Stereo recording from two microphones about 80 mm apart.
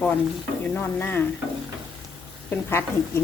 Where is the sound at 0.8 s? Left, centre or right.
Left.